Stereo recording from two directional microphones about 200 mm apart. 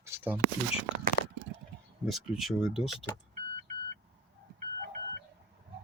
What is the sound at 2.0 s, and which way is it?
Speech, centre (ahead or behind).